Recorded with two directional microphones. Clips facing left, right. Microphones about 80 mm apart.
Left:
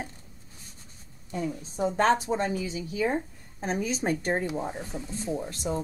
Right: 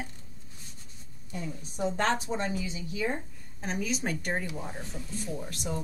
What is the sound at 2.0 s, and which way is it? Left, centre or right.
Speech, left.